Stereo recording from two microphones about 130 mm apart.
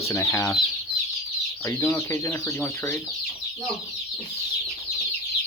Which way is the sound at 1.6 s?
20° left (ahead or behind).